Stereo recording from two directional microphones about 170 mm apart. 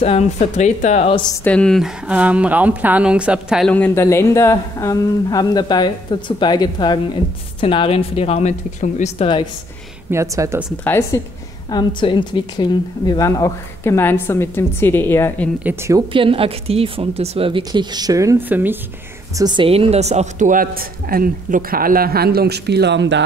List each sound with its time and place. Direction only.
0.0 s speech: 40° left (ahead or behind)
1.4 s a woman's voice: 5° left (ahead or behind)
2.0 s a woman's voice: 5° right (ahead or behind)
3.7 s speech: 10° left (ahead or behind); by 9.3 s 45° left (ahead or behind)
10.1 s speech: 20° right (ahead or behind)
10.8 s a woman's voice: 10° left (ahead or behind)
11.7 s a woman's voice: 30° left (ahead or behind); by 15.5 s 10° left (ahead or behind)
15.6 s a woman's voice: 15° right (ahead or behind)
16.1 s a woman's voice: 30° right (ahead or behind); by 18.8 s 10° right (ahead or behind)
19.3 s speech: 25° right (ahead or behind); by 23.2 s 90° right